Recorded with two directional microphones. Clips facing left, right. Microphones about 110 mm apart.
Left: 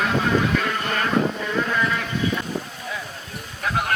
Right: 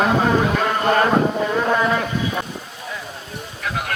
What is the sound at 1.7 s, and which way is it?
Sheep, 35° right (ahead or behind).